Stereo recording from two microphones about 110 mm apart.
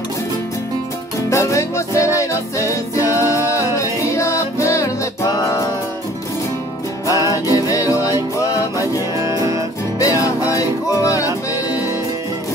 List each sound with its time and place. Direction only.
1.3 s music: 30° left (ahead or behind)
7.1 s music: 30° left (ahead or behind)
9.1 s music: 30° right (ahead or behind)
9.9 s music: 30° left (ahead or behind)